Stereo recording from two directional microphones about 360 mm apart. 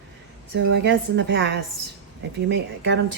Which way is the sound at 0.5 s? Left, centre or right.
Right.